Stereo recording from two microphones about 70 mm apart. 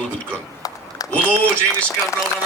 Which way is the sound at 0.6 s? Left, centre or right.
Left.